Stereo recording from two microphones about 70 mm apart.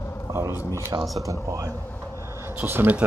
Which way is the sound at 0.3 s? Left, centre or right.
Right.